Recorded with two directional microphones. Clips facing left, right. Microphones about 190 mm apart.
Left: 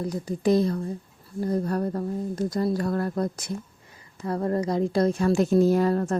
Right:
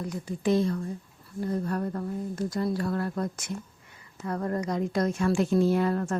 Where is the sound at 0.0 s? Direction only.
35° left (ahead or behind).